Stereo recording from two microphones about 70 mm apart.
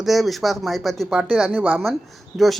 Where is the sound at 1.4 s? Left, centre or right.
Centre.